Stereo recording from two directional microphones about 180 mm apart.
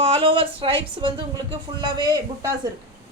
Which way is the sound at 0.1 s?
30° right (ahead or behind).